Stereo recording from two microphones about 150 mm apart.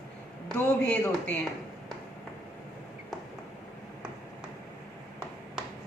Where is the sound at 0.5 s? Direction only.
5° left (ahead or behind).